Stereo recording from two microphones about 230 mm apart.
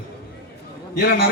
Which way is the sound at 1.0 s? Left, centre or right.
Left.